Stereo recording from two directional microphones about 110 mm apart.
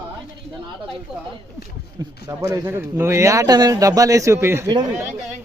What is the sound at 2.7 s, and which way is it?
A man's voice, 20° right (ahead or behind).